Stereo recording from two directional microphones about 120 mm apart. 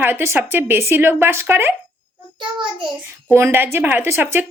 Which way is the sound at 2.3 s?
45° right (ahead or behind).